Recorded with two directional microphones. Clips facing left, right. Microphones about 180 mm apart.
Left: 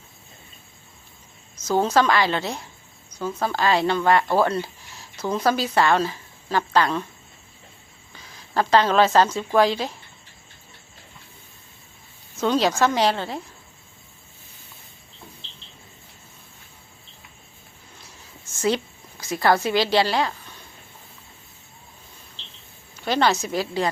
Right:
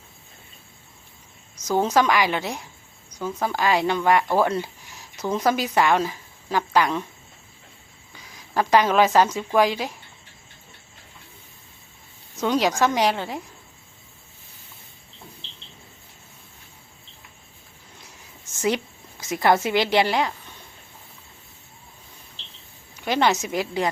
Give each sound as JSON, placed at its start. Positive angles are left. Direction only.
{"t": 1.5, "sound": "speech", "side_deg": -15}
{"t": 8.4, "sound": "speech", "side_deg": -15}
{"t": 12.4, "sound": "speech", "side_deg": -15}
{"t": 19.2, "sound": "a woman's voice", "side_deg": -20}
{"t": 23.0, "sound": "a woman's voice", "side_deg": -15}